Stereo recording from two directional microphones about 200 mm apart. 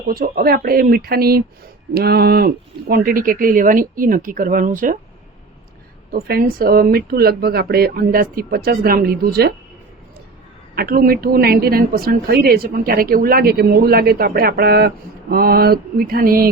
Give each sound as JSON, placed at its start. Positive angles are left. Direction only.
{"t": 0.1, "sound": "a woman's voice", "side_deg": -50}
{"t": 6.1, "sound": "a woman's voice", "side_deg": -50}
{"t": 10.8, "sound": "a woman's voice", "side_deg": -45}